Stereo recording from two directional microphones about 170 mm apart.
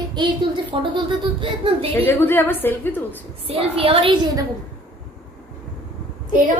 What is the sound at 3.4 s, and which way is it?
Speech, 35° right (ahead or behind).